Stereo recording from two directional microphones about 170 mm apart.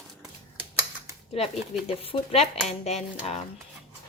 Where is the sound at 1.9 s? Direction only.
35° left (ahead or behind).